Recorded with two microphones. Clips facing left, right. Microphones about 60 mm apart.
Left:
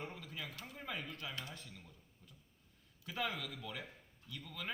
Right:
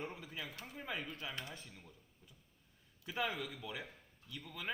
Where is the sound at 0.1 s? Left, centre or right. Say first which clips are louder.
Right 1 dB; centre.